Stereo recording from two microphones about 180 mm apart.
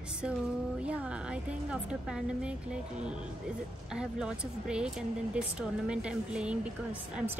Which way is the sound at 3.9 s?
5° right (ahead or behind).